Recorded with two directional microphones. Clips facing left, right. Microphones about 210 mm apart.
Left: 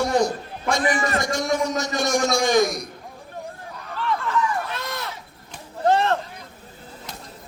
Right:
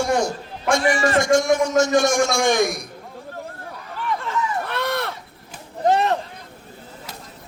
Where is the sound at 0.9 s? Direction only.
30° right (ahead or behind).